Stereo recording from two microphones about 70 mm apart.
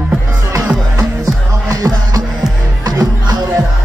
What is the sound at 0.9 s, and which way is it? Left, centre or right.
Music, right.